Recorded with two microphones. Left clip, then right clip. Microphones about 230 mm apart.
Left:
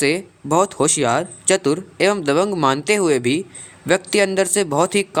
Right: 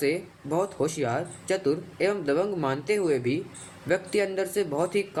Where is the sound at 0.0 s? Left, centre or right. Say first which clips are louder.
Left 8 dB; left.